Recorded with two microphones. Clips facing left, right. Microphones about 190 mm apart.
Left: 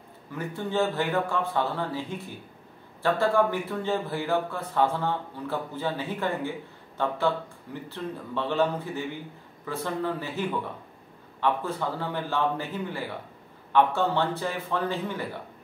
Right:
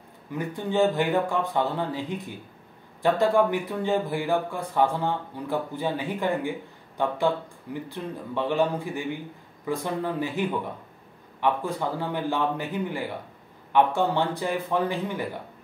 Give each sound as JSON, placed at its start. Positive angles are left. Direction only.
{"t": 0.4, "sound": "speech", "side_deg": -15}
{"t": 11.4, "sound": "speech", "side_deg": -15}